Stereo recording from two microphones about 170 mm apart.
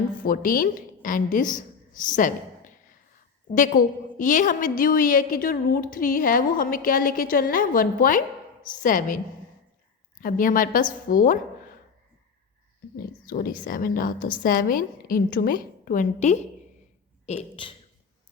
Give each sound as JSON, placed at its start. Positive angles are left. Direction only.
{"t": 0.2, "sound": "a woman's voice", "side_deg": 55}
{"t": 13.0, "sound": "a woman's voice", "side_deg": 55}
{"t": 17.2, "sound": "speech", "side_deg": 35}